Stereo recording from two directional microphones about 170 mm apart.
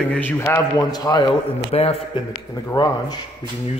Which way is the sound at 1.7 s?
35° left (ahead or behind).